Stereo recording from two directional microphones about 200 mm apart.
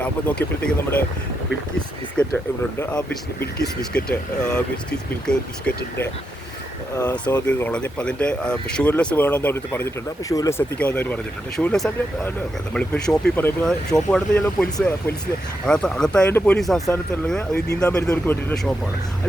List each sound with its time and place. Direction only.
2.2 s speech: 5° left (ahead or behind)
3.4 s speech: 5° left (ahead or behind)
6.9 s speech: 15° left (ahead or behind)
7.4 s speech: 5° left (ahead or behind)